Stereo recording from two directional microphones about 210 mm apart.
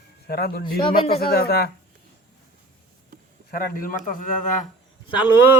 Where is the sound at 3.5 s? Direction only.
45° left (ahead or behind).